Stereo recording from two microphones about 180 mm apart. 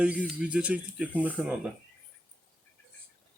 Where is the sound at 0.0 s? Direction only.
5° right (ahead or behind).